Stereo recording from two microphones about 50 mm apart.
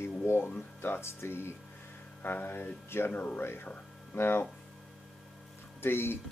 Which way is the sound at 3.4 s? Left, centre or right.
Left.